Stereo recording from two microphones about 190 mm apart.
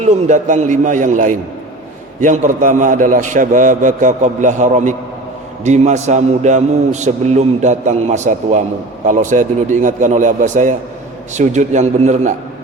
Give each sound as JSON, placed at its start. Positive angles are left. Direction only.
{"t": 0.0, "sound": "a man's voice", "side_deg": -40}